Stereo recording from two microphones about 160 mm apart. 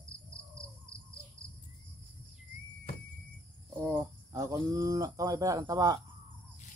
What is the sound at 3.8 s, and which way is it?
Cricket, 20° right (ahead or behind).